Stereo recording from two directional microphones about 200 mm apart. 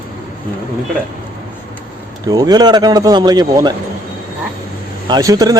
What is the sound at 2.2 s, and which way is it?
Speech, 20° right (ahead or behind).